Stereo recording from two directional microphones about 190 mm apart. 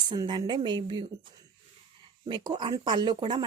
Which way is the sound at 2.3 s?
25° right (ahead or behind).